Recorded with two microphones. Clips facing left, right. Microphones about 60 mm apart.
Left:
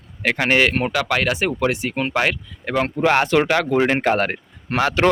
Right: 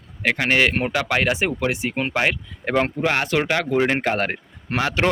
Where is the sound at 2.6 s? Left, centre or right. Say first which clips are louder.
Right 1 dB; right.